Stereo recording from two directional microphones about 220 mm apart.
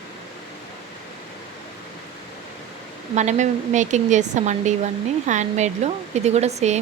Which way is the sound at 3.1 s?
35° right (ahead or behind).